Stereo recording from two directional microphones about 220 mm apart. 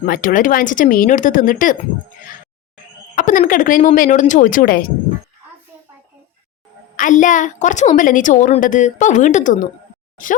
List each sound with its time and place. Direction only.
0.0 s a woman's voice: 40° left (ahead or behind)
3.2 s a woman's voice: 35° left (ahead or behind)
6.9 s a woman's voice: 35° left (ahead or behind)